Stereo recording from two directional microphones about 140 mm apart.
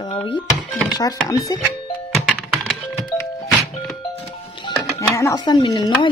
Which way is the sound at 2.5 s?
Centre (ahead or behind).